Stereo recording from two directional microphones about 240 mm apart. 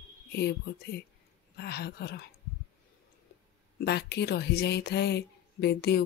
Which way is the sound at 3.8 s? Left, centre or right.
Left.